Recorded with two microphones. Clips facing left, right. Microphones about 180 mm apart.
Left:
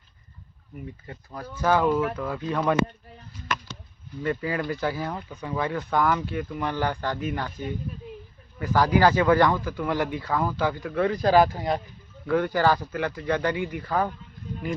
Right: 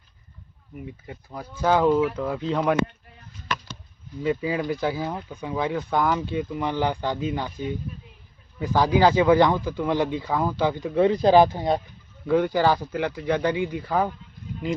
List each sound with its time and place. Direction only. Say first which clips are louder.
1.0 s speech: right 1 dB; 10° right (ahead or behind)
4.2 s speech: right 3 dB; 10° right (ahead or behind)
8.5 s speech: right 1 dB; 15° right (ahead or behind)